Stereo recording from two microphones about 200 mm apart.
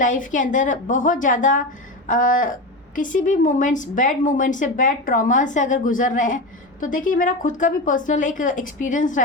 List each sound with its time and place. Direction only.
0.0 s speech: 40° left (ahead or behind)